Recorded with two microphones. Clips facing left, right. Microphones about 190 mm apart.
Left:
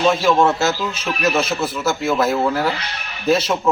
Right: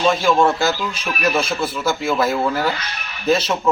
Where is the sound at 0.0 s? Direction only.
5° left (ahead or behind).